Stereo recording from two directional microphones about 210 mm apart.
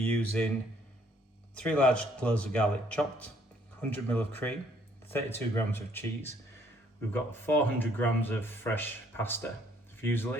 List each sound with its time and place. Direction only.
0.0 s a man's voice: 5° left (ahead or behind)
1.5 s a man's voice: 5° left (ahead or behind)
5.5 s speech: 10° left (ahead or behind)